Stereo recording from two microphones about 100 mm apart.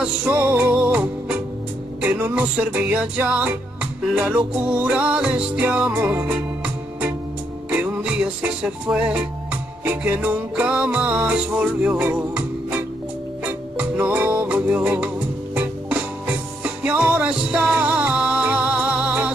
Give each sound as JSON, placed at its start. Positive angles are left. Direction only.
{"t": 0.0, "sound": "music", "side_deg": -15}